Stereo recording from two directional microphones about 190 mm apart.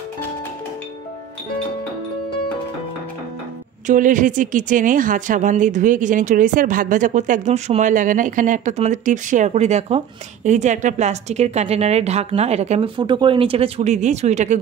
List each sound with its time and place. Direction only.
3.8 s a woman's voice: 45° right (ahead or behind)